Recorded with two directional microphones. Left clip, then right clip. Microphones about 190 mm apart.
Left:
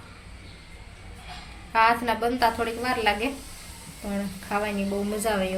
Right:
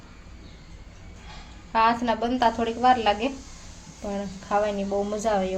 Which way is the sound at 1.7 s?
35° right (ahead or behind).